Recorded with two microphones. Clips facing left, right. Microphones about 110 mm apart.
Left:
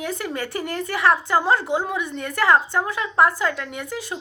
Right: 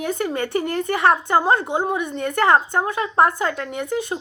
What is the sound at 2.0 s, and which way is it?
Speech, 45° right (ahead or behind).